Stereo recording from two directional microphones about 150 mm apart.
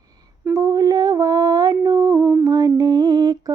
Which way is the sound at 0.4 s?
20° right (ahead or behind).